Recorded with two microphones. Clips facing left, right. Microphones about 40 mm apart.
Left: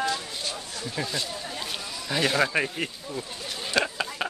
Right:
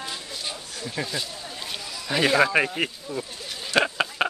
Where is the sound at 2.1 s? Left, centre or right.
Right.